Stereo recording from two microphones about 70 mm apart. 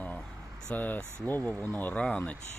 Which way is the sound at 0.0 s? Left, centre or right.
Left.